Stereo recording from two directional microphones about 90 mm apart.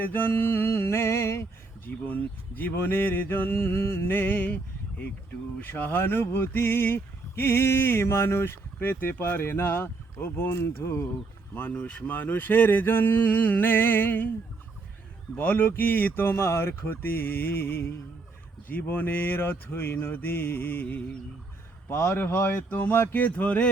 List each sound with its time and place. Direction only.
0.0 s speech: 25° left (ahead or behind)
11.5 s speech: 15° left (ahead or behind)
15.4 s speech: 20° left (ahead or behind)